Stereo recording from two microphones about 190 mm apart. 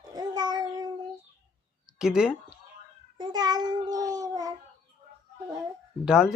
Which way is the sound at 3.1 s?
20° right (ahead or behind).